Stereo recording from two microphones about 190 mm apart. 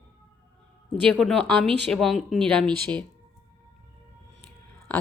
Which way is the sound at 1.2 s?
5° left (ahead or behind).